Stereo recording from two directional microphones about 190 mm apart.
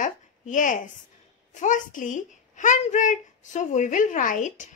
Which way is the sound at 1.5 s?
40° left (ahead or behind).